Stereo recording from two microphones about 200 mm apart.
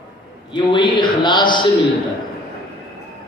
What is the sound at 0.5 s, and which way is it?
A man's voice, 25° left (ahead or behind).